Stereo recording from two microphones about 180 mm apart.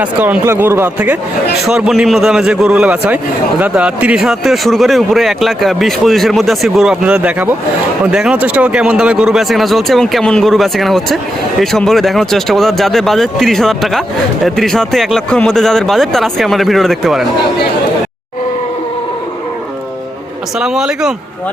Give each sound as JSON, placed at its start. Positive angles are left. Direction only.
{"t": 0.0, "sound": "a man's voice", "side_deg": -10}
{"t": 20.6, "sound": "a man's voice", "side_deg": -5}